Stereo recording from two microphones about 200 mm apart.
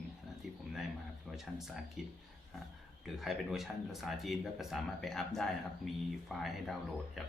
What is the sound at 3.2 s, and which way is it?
Speech, centre (ahead or behind).